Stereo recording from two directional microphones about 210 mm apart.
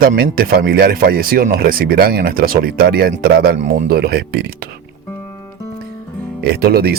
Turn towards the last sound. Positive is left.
turn(degrees=-45)  # may be behind; listen again after turning